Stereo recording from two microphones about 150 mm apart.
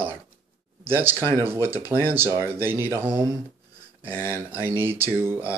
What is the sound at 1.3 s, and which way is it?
Speech, 15° right (ahead or behind).